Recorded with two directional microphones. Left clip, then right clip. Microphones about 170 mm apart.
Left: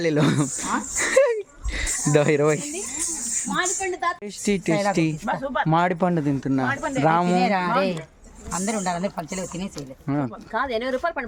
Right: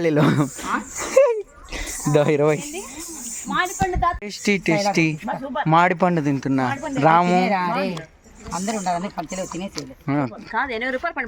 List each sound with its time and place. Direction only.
0.0 s speech: 10° right (ahead or behind)
0.6 s speech: 10° left (ahead or behind)
1.1 s a sound: 10° right (ahead or behind)
2.1 s speech: 10° right (ahead or behind)
3.5 s a woman's voice: 30° right (ahead or behind)
4.4 s speech: 5° right (ahead or behind)
7.6 s speech: 10° left (ahead or behind)
9.7 s speech: 10° right (ahead or behind)
10.5 s speech: 90° left